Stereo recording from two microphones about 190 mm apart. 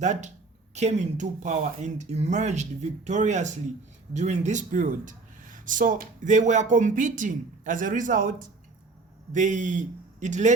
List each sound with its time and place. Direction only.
0.0 s speech: 40° right (ahead or behind)
9.3 s speech: 40° right (ahead or behind)